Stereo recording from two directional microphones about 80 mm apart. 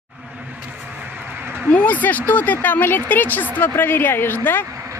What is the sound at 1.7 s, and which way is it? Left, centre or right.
Speech, left.